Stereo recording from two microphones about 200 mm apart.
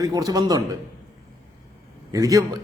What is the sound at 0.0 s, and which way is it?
Speech, 20° right (ahead or behind).